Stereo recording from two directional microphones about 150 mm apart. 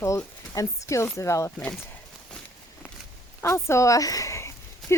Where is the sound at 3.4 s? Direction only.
20° left (ahead or behind).